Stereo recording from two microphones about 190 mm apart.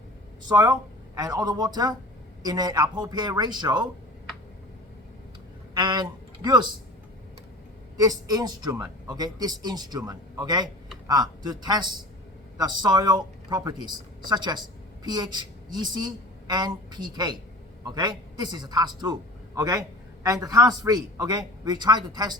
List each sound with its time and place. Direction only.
0.4 s a man's voice: 20° right (ahead or behind)
5.7 s speech: 20° right (ahead or behind)
7.9 s a man's voice: 20° right (ahead or behind)